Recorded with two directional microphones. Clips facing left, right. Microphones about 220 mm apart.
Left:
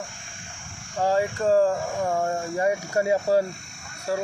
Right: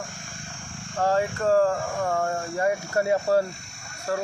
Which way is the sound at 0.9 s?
10° left (ahead or behind).